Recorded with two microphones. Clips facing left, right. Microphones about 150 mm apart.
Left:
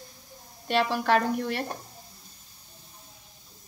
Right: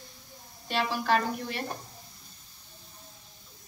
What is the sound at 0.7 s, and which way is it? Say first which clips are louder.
Speech: left 3 dB; 65° left (ahead or behind).